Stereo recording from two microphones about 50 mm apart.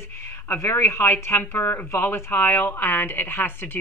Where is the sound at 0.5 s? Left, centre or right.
Left.